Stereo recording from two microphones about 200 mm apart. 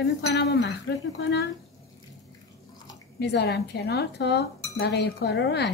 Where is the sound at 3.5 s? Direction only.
55° left (ahead or behind).